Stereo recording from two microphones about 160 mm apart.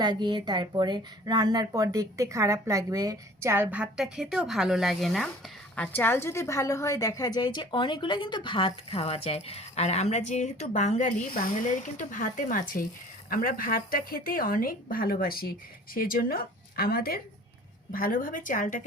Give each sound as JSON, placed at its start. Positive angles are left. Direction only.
{"t": 0.0, "sound": "a woman's voice", "side_deg": -30}